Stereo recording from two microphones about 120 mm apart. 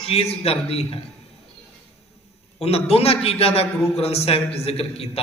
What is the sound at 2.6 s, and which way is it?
A man's voice, 60° left (ahead or behind).